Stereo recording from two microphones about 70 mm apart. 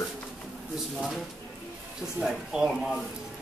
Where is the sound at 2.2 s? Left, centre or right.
Centre.